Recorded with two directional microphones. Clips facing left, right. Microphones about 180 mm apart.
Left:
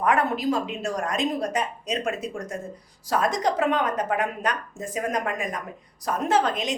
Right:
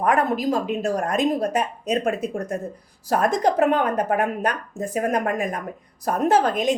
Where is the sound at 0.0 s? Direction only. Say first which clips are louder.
Right 2 dB; 45° right (ahead or behind).